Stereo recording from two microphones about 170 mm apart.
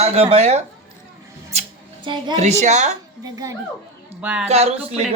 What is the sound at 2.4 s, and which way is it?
Speech, 40° right (ahead or behind).